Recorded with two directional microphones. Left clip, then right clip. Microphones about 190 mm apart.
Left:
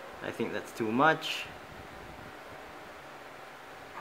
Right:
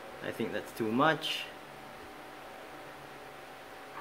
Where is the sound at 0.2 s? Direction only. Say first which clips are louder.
Left 1 dB; 25° left (ahead or behind).